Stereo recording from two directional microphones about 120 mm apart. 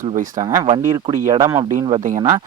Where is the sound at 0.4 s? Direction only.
35° right (ahead or behind).